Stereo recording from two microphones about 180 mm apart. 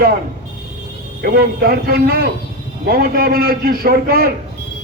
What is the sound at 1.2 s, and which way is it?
Speech, 55° right (ahead or behind).